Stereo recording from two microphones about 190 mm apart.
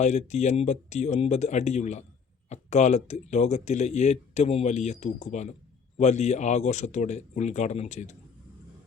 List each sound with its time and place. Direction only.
0.0 s speech: 35° left (ahead or behind)